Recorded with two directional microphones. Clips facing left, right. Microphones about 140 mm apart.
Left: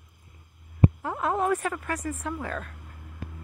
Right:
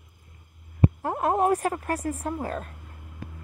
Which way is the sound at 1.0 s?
50° right (ahead or behind).